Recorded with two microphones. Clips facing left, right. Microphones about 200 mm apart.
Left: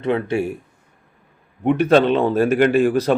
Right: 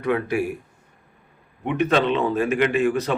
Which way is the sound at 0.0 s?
25° left (ahead or behind).